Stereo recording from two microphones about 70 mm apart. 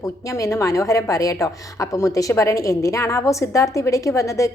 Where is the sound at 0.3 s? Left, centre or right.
Left.